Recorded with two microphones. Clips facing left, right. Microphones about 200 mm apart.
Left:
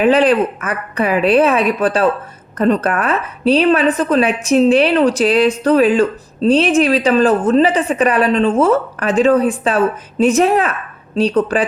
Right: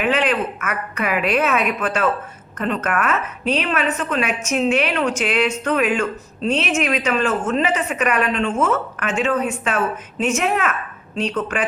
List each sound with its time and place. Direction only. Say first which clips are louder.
0.0 s a woman's voice: left 8 dB; 35° left (ahead or behind)